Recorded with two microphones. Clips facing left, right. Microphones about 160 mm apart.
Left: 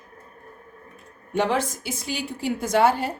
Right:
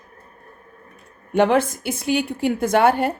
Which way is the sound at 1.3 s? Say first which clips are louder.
Right 6 dB; 55° right (ahead or behind).